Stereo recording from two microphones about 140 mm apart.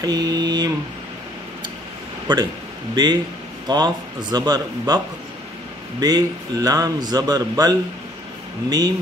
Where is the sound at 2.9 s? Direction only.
30° right (ahead or behind).